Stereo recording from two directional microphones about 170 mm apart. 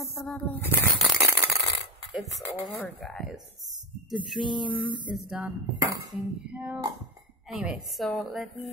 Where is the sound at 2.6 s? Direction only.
Centre (ahead or behind).